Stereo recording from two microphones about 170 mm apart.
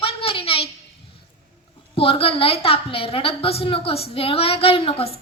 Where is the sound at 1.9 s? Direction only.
35° left (ahead or behind).